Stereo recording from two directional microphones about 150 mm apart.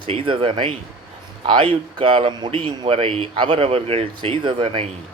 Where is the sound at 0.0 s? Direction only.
35° right (ahead or behind).